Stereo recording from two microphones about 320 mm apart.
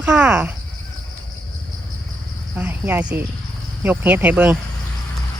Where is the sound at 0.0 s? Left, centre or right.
Centre.